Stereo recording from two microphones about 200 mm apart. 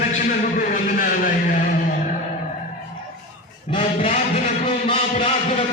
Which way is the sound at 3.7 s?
30° left (ahead or behind).